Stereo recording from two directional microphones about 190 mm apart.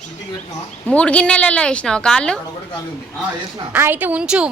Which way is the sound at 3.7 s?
10° right (ahead or behind).